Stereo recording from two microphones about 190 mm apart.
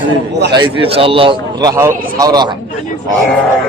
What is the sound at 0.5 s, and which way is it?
A man's voice, 25° right (ahead or behind).